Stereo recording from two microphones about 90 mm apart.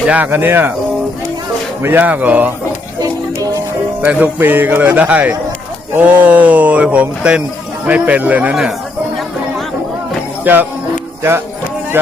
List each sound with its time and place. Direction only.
0.1 s a man's voice: 20° right (ahead or behind)
1.8 s speech: 20° right (ahead or behind)
4.0 s a man's voice: 20° right (ahead or behind)
10.4 s speech: 20° right (ahead or behind)